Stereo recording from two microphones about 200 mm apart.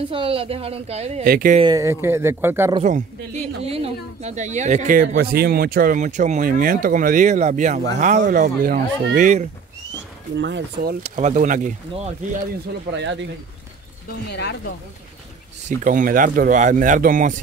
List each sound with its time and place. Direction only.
0.1 s speech: 25° right (ahead or behind)
1.2 s speech: 45° right (ahead or behind)
1.6 s speech: 15° right (ahead or behind)
2.8 s speech: 35° right (ahead or behind)
10.3 s speech: 60° right (ahead or behind)
11.0 s speech: 35° right (ahead or behind)
12.9 s speech: 65° right (ahead or behind)
14.0 s speech: 55° left (ahead or behind)
15.8 s speech: 40° right (ahead or behind)